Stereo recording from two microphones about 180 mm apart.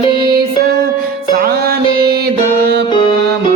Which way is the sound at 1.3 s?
60° right (ahead or behind).